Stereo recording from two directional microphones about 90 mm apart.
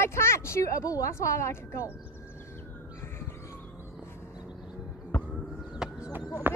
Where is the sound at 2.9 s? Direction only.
25° left (ahead or behind).